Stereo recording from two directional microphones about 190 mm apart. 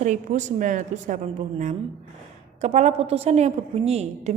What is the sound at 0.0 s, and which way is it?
A woman's voice, 40° right (ahead or behind).